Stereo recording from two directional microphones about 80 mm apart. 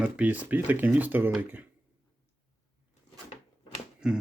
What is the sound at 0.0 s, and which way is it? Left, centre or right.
Speech, centre.